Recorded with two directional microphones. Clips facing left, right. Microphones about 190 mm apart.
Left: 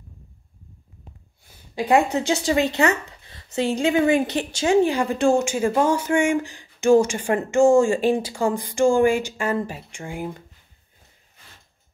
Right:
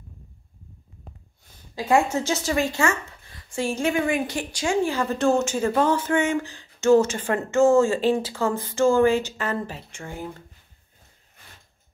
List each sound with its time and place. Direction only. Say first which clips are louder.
1.8 s a woman's voice: left 2 dB; 15° left (ahead or behind)